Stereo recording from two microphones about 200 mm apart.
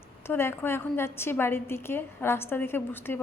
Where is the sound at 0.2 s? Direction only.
10° left (ahead or behind).